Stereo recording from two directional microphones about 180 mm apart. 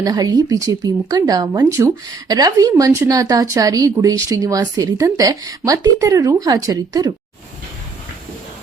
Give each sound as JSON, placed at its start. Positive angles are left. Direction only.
{"t": 0.0, "sound": "speech", "side_deg": -20}